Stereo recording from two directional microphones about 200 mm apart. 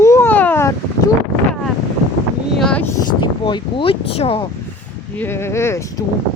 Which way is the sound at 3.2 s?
25° left (ahead or behind).